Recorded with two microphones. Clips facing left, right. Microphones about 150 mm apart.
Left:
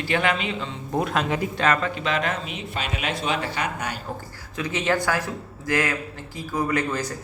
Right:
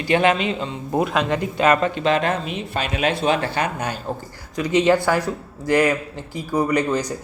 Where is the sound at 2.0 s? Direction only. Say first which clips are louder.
Right 6 dB; 30° right (ahead or behind).